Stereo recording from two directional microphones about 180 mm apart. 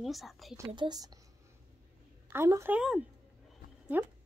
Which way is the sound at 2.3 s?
15° right (ahead or behind).